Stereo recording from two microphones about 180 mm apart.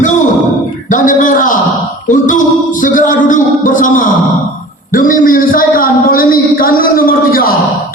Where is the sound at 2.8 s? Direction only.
45° left (ahead or behind).